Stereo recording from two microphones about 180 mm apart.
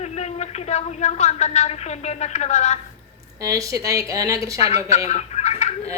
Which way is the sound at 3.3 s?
20° right (ahead or behind).